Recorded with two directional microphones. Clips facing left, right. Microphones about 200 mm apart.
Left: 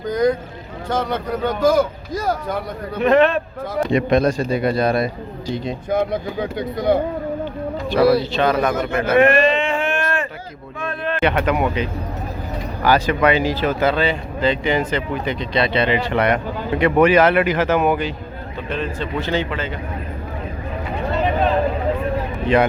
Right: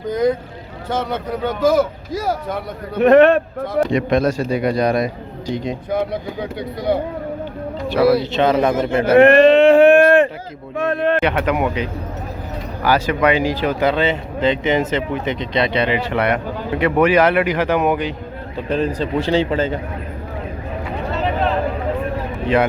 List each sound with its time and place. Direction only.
0.0 s a sound: 5° right (ahead or behind)
0.9 s a man's voice: 5° right (ahead or behind)
3.0 s a man's voice: 60° right (ahead or behind)
3.9 s speech: centre (ahead or behind)
5.9 s speech: 50° left (ahead or behind)
7.9 s a man's voice: 5° right (ahead or behind)
8.2 s speech: 20° right (ahead or behind)
9.5 s a sound: 65° right (ahead or behind)
11.2 s speech: 5° right (ahead or behind)
18.5 s a man's voice: 40° right (ahead or behind)
22.5 s a man's voice: 5° right (ahead or behind)